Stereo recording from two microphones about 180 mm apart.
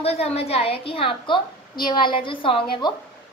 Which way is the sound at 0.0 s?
35° left (ahead or behind).